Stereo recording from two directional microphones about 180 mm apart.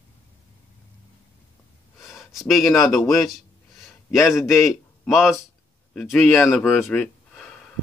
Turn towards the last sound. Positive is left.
turn(degrees=5)  # may be behind; listen again after turning